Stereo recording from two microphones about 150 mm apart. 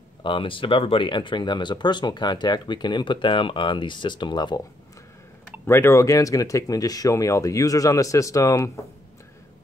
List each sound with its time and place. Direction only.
0.2 s speech: 35° left (ahead or behind)
5.7 s speech: 15° left (ahead or behind)